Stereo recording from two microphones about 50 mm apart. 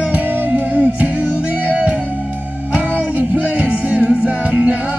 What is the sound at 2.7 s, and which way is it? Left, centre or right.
Music, right.